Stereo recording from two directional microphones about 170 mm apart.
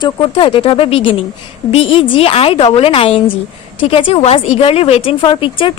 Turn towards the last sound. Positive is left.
turn(degrees=30)  # may be behind; listen again after turning